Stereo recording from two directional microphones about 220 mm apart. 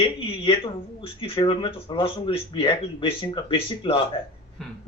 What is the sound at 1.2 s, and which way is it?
Speech, 25° left (ahead or behind).